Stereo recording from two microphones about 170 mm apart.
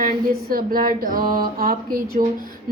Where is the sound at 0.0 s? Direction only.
60° right (ahead or behind).